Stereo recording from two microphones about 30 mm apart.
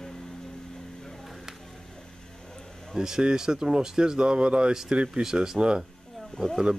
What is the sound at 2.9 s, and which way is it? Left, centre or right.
Speech, centre.